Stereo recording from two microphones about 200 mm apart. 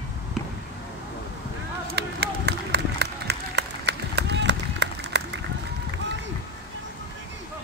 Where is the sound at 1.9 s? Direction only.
55° right (ahead or behind).